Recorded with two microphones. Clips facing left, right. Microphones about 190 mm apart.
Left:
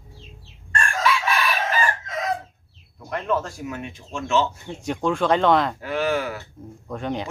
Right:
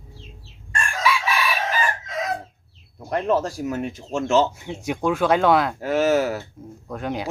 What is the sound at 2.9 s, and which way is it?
Speech, 35° right (ahead or behind).